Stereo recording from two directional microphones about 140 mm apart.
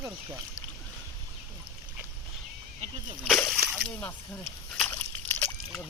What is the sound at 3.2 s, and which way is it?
Speech, centre (ahead or behind).